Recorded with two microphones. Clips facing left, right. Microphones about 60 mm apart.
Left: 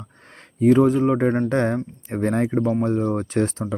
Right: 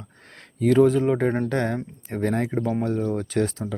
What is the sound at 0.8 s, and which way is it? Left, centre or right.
Speech, centre.